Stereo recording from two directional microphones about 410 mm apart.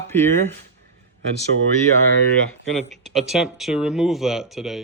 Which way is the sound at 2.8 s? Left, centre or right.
Centre.